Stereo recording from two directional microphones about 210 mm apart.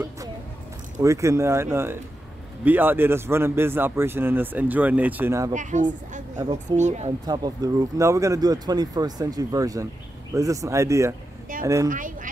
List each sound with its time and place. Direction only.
1.0 s speech: 15° right (ahead or behind)
5.5 s speech: 35° right (ahead or behind)
6.3 s speech: 20° right (ahead or behind)
6.8 s speech: 35° right (ahead or behind)
7.2 s speech: 20° right (ahead or behind)
11.9 s speech: 40° right (ahead or behind)